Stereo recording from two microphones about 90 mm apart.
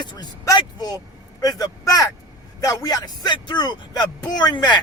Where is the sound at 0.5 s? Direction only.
45° left (ahead or behind).